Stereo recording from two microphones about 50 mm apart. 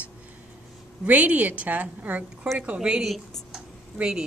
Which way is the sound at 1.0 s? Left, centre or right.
Right.